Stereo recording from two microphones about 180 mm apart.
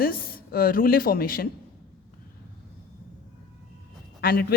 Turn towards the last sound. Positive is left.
turn(degrees=60)  # may be behind; listen again after turning